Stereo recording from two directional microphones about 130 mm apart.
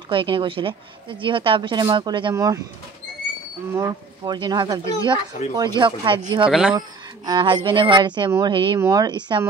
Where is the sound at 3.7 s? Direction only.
30° right (ahead or behind).